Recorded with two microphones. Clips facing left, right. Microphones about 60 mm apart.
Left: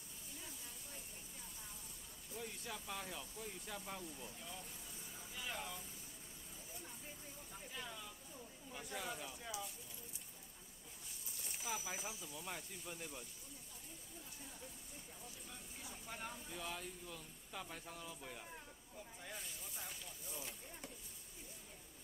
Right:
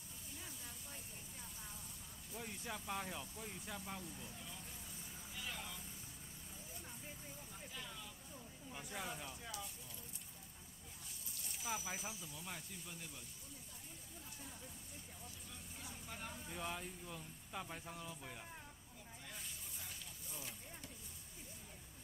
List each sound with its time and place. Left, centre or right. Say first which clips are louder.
2.3 s speech: right 1 dB; centre
5.5 s vehicle: left 4 dB; centre
8.7 s a sound: left 1 dB; centre
11.6 s speech: right 1 dB; centre
12.9 s speech: left 6 dB; centre
15.8 s vehicle: left 1 dB; centre
16.4 s speech: right 2 dB; centre
19.3 s a sound: left 3 dB; centre